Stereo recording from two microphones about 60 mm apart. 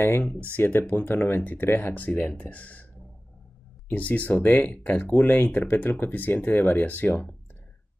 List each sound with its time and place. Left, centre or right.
0.0 s speech: left
3.9 s speech: left
5.5 s speech: left